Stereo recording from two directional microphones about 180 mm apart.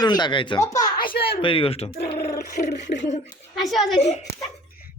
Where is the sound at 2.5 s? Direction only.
40° left (ahead or behind).